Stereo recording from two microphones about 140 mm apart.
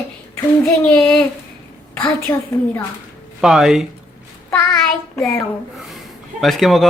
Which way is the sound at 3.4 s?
Centre (ahead or behind).